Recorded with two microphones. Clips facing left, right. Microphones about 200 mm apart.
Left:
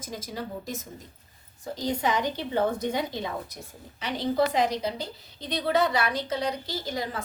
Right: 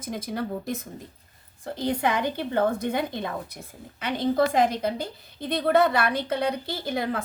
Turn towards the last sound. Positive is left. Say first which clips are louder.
# right 4 dB
turn(degrees=-60)  # may be behind; listen again after turning